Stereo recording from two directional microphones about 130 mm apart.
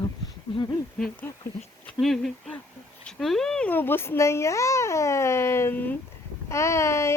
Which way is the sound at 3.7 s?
15° left (ahead or behind).